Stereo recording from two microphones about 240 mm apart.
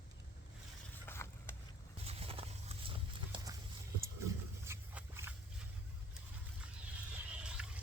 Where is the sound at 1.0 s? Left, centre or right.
Centre.